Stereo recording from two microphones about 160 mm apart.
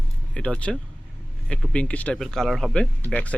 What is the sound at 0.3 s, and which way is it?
Speech, 5° left (ahead or behind).